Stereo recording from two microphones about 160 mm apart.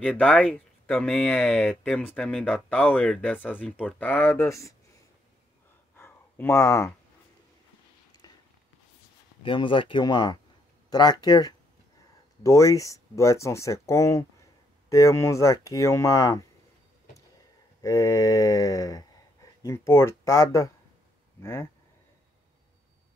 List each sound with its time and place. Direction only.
0.0 s speech: 5° left (ahead or behind)
5.9 s a sound: 15° left (ahead or behind)
9.4 s speech: 30° left (ahead or behind)
17.8 s speech: 20° left (ahead or behind)